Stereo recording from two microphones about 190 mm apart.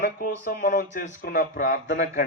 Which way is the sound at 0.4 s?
50° left (ahead or behind).